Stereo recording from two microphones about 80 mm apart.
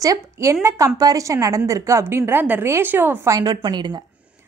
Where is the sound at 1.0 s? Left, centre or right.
Right.